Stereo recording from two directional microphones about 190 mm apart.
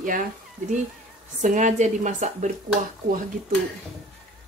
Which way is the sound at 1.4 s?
40° right (ahead or behind).